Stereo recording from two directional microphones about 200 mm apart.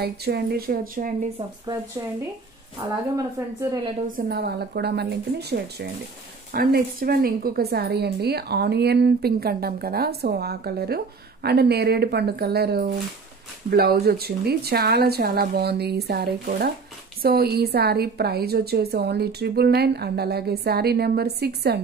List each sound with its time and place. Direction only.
0.0 s a woman's voice: 50° right (ahead or behind)
3.3 s speech: 20° right (ahead or behind)
4.1 s a woman's voice: 55° right (ahead or behind)